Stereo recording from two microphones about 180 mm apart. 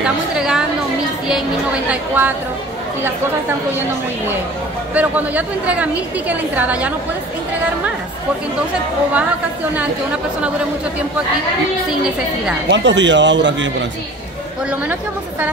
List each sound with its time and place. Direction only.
0.0 s a sound: 5° right (ahead or behind)
1.9 s a woman's voice: 10° right (ahead or behind)
4.9 s a woman's voice: 10° right (ahead or behind)
12.6 s a man's voice: 80° right